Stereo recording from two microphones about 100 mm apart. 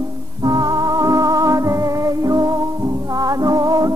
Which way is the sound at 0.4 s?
40° right (ahead or behind).